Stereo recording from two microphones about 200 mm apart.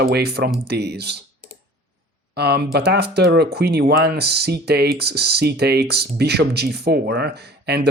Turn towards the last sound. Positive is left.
turn(degrees=-55)  # may be behind; listen again after turning